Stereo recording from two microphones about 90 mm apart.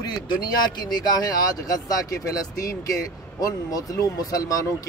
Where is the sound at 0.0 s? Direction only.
50° left (ahead or behind).